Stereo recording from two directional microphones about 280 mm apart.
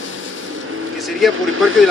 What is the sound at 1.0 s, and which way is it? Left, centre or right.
Speech, centre.